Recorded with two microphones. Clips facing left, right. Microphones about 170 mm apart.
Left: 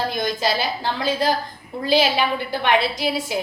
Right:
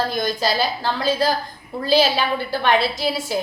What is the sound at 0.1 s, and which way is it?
A woman's voice, 20° left (ahead or behind).